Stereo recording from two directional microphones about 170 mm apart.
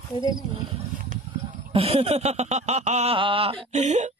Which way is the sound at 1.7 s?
35° right (ahead or behind).